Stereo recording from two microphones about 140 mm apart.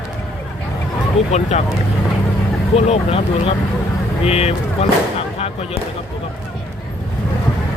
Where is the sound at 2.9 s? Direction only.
45° left (ahead or behind).